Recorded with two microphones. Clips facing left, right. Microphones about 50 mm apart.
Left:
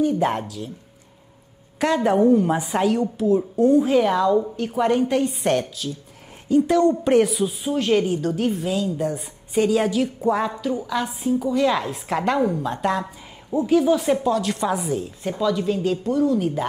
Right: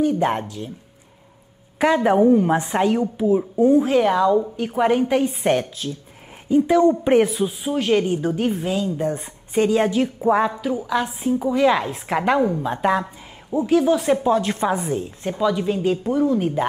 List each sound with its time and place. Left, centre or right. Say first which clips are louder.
0.0 s speech: right 1 dB; centre
1.8 s a woman's voice: right 2 dB; centre
4.6 s a woman's voice: right 2 dB; centre
8.2 s a woman's voice: right 1 dB; centre
8.6 s speech: right 1 dB; centre
9.8 s a woman's voice: right 2 dB; centre
11.2 s a woman's voice: right 2 dB; centre
13.0 s a woman's voice: even; centre
14.1 s speech: right 2 dB; right
14.7 s speech: right 1 dB; centre
15.0 s a woman's voice: right 1 dB; centre